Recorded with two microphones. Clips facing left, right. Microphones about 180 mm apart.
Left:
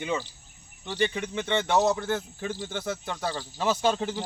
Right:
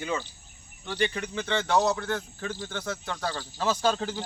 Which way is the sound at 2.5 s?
5° left (ahead or behind).